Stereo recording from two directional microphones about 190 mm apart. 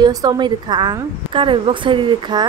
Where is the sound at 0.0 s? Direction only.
20° right (ahead or behind).